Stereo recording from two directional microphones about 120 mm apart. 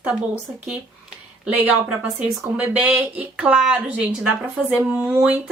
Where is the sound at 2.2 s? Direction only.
10° right (ahead or behind).